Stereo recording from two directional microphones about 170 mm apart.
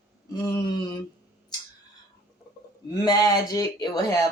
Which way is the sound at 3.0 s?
20° left (ahead or behind).